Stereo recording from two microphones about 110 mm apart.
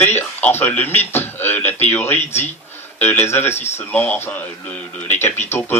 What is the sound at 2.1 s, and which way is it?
Speech, 85° left.